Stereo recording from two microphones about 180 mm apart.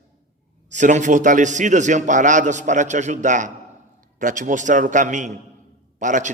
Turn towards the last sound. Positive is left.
turn(degrees=-45)  # may be behind; listen again after turning